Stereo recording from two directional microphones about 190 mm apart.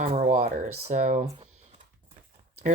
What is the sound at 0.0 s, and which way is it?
Speech, 35° right (ahead or behind).